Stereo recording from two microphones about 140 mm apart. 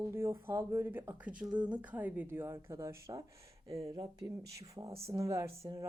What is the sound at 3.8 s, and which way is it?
Speech, 35° right (ahead or behind).